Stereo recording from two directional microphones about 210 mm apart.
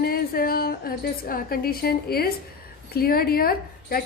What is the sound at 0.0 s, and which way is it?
A woman's voice, 45° left (ahead or behind).